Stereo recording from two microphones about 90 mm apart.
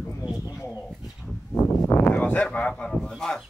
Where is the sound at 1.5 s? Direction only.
25° left (ahead or behind).